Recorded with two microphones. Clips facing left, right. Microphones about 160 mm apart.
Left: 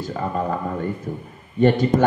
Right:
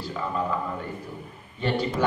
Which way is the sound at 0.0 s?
45° left (ahead or behind).